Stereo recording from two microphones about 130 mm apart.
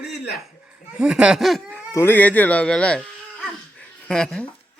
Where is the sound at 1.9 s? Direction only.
15° left (ahead or behind).